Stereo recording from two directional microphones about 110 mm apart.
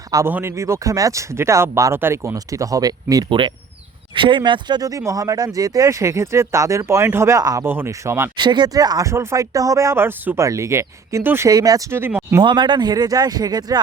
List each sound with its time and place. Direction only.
0.3 s speech: 20° right (ahead or behind)
3.2 s speech: 50° right (ahead or behind); by 8.3 s 25° right (ahead or behind)
8.4 s speech: 45° right (ahead or behind); by 11.4 s 20° right (ahead or behind)
11.4 s speech: 35° right (ahead or behind); by 12.4 s 20° right (ahead or behind)
12.4 s speech: 40° right (ahead or behind)